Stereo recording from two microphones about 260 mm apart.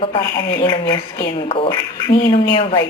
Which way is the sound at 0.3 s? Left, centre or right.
Centre.